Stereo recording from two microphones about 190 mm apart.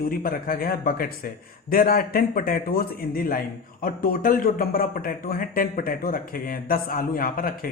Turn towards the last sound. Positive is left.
turn(degrees=50)  # may be behind; listen again after turning